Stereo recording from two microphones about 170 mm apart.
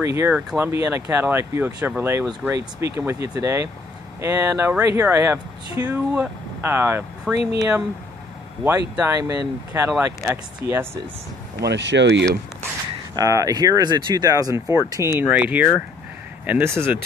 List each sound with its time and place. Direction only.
0.0 s speech: 15° right (ahead or behind)
8.9 s speech: 15° right (ahead or behind)
11.6 s speech: 90° right
13.1 s speech: 20° right (ahead or behind)